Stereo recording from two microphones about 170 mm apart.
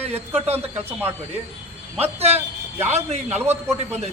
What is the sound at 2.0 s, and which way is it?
Speech, 35° right (ahead or behind).